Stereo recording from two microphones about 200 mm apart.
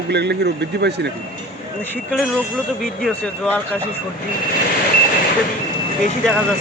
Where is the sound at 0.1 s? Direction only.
55° right (ahead or behind).